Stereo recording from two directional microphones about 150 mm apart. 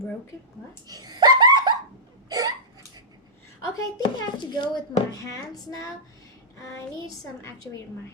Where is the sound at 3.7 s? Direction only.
30° left (ahead or behind).